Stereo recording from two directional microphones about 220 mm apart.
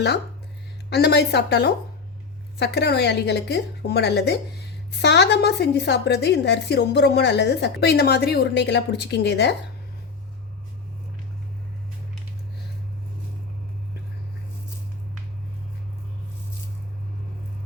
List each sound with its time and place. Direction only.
0.9 s a woman's voice: 50° left (ahead or behind)